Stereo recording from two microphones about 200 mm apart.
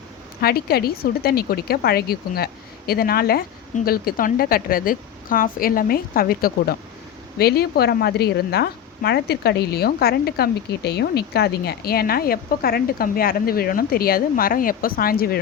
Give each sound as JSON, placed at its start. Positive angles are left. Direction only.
{"t": 0.4, "sound": "a woman's voice", "side_deg": 50}